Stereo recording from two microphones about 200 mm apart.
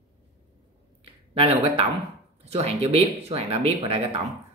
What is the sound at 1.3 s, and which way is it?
Speech, 30° right (ahead or behind).